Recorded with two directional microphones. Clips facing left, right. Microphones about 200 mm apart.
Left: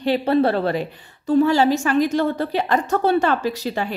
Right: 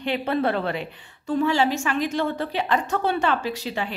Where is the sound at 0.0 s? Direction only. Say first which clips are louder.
Left 6 dB; 35° left (ahead or behind).